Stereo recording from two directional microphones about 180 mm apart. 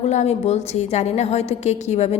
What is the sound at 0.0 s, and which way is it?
A woman's voice, 40° left (ahead or behind).